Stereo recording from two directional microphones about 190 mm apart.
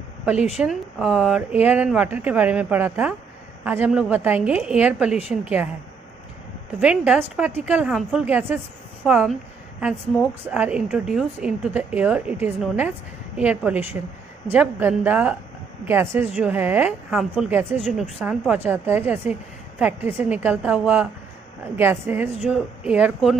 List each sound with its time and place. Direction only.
0.2 s speech: 5° right (ahead or behind)
6.8 s speech: 5° right (ahead or behind)
9.0 s a sound: 5° right (ahead or behind)
10.4 s speech: 10° right (ahead or behind)